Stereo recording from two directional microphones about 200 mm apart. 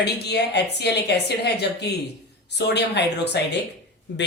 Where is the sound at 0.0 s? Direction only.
55° left (ahead or behind).